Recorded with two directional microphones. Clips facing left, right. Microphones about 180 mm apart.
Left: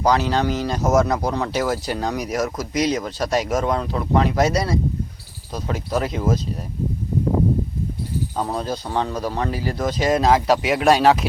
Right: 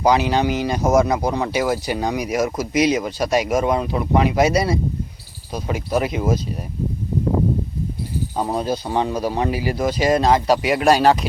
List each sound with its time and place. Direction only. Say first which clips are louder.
0.0 s speech: right 2 dB; 15° right (ahead or behind)
0.9 s speech: right 1 dB; centre (ahead or behind)
8.4 s speech: right 4 dB; 15° right (ahead or behind)